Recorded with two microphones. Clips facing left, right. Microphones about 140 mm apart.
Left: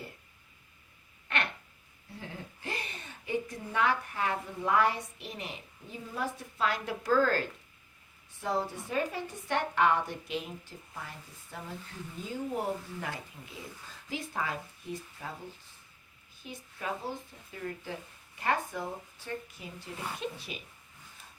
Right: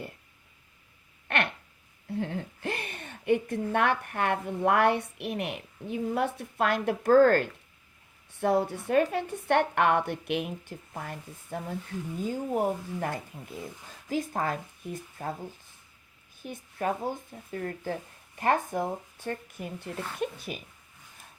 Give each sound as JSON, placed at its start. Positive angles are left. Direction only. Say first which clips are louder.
{"t": 1.3, "sound": "a sound", "louder": "right 5 dB", "side_deg": -60}
{"t": 2.1, "sound": "a woman's voice", "louder": "right 11 dB", "side_deg": -60}
{"t": 8.4, "sound": "a woman's voice", "louder": "right 7 dB", "side_deg": -65}
{"t": 16.4, "sound": "a woman's voice", "louder": "right 8 dB", "side_deg": -55}